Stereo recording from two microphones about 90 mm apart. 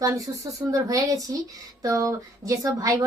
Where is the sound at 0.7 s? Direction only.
40° right (ahead or behind).